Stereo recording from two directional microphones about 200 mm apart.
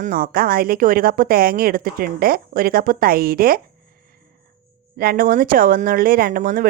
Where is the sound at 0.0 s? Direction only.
45° right (ahead or behind).